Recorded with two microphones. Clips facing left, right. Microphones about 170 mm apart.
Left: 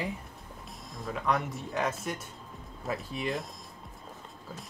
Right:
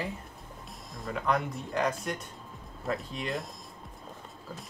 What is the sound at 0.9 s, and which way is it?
Speech, centre (ahead or behind).